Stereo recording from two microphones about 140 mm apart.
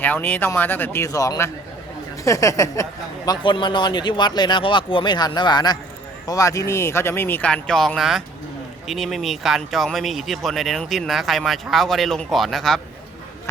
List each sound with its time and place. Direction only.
0.0 s speech: 10° left (ahead or behind)
3.2 s speech: 35° left (ahead or behind); by 12.8 s centre (ahead or behind)